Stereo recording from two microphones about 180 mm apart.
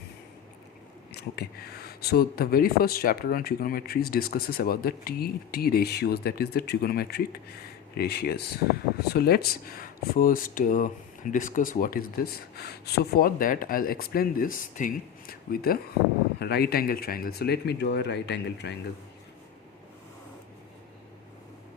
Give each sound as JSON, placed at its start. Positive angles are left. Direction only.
{"t": 1.1, "sound": "speech", "side_deg": 60}